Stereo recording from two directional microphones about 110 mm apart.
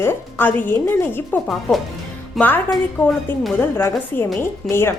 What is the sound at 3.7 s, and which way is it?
A woman's voice, 20° left (ahead or behind).